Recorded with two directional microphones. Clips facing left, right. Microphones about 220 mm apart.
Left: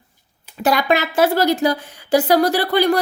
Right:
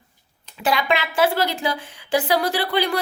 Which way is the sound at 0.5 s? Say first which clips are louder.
Left 4 dB; 45° left (ahead or behind).